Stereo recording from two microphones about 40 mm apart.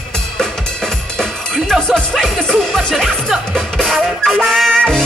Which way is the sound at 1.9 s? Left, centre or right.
Centre.